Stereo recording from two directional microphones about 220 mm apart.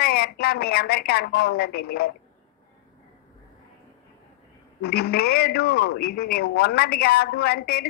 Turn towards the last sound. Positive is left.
turn(degrees=45)  # may be behind; listen again after turning